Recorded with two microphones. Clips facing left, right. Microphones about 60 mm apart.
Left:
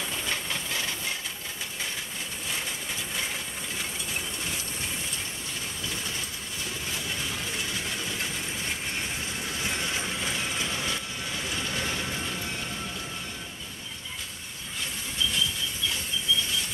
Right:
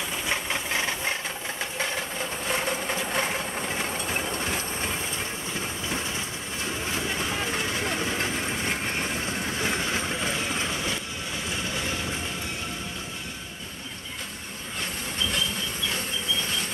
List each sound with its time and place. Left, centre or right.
0.3 s a sound: right
1.6 s vehicle: right
7.2 s train: right